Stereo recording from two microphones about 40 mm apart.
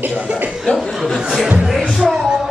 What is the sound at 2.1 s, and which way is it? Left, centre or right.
Music, centre.